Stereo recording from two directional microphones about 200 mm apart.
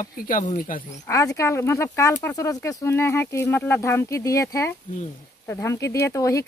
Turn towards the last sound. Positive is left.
turn(degrees=15)  # may be behind; listen again after turning